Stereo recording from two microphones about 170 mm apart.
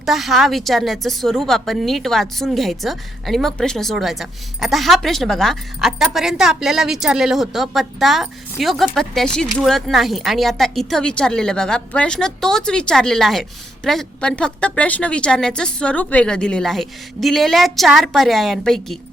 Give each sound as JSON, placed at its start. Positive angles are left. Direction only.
{"t": 0.0, "sound": "a woman's voice", "side_deg": 0}